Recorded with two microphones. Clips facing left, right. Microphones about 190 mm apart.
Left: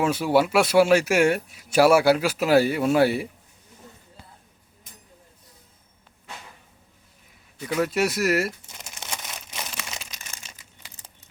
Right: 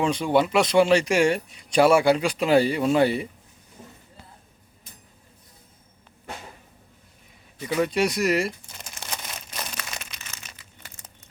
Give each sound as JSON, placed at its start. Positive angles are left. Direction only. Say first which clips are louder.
{"t": 0.0, "sound": "speech", "louder": "left 1 dB", "side_deg": 5}
{"t": 7.6, "sound": "speech", "louder": "right 1 dB", "side_deg": 0}
{"t": 9.1, "sound": "crumpling", "louder": "right 1 dB", "side_deg": 5}